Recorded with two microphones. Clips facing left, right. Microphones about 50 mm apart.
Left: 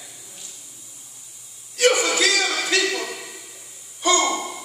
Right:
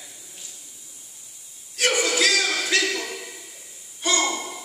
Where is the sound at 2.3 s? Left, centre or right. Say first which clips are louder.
Left 1 dB; left.